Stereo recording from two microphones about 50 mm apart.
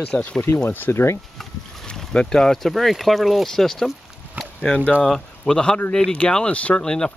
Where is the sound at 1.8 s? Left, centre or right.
Centre.